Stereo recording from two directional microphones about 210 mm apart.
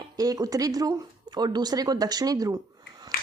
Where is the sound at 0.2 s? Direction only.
15° right (ahead or behind).